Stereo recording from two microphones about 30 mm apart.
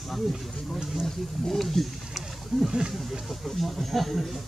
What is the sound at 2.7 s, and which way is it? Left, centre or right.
Speech, right.